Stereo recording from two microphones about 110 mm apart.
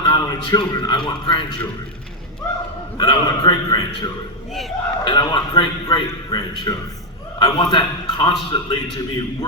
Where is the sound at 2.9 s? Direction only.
40° left (ahead or behind).